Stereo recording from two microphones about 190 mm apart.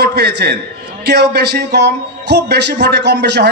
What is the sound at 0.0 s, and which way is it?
A man's voice, 60° right (ahead or behind).